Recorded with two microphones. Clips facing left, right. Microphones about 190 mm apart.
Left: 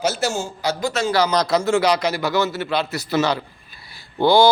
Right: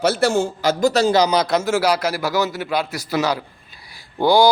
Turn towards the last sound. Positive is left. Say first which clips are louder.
# even
turn(degrees=-15)  # may be behind; listen again after turning